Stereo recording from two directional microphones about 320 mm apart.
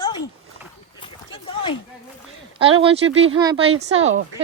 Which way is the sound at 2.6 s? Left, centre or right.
Centre.